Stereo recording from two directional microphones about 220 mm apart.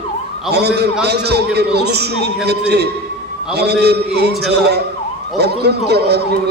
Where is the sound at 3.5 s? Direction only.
50° right (ahead or behind).